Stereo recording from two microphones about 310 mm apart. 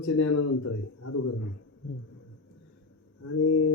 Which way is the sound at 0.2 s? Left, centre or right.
Left.